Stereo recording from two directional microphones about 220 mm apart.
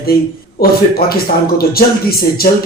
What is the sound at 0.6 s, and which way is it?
Speech, 45° left (ahead or behind).